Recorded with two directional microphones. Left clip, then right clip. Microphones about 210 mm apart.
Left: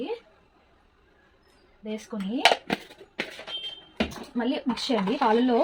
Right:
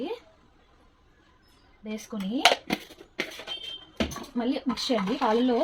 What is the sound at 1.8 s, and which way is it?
Speech, 40° left (ahead or behind).